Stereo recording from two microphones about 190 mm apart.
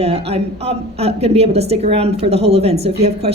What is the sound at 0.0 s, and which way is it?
A woman's voice, 35° right (ahead or behind).